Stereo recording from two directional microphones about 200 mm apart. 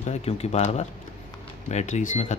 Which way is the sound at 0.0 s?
30° left (ahead or behind).